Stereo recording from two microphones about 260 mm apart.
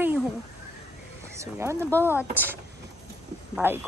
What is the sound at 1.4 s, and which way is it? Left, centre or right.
Speech, centre.